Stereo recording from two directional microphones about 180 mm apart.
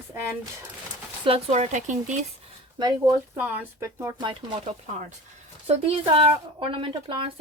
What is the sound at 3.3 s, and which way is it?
Speech, 10° right (ahead or behind).